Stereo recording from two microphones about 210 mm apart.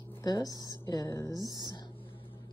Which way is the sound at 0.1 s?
15° left (ahead or behind).